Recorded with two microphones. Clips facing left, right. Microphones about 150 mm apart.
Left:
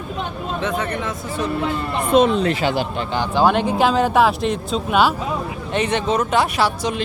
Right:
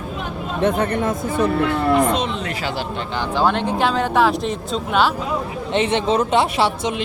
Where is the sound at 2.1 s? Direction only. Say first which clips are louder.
Left 8 dB; 50° left (ahead or behind).